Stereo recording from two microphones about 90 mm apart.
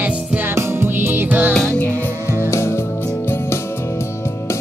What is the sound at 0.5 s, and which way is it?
Music, 30° right (ahead or behind).